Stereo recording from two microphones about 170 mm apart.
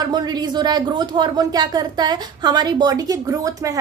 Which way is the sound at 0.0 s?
25° right (ahead or behind).